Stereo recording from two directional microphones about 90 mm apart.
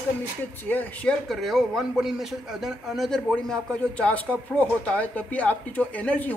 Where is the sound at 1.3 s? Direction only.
Centre (ahead or behind).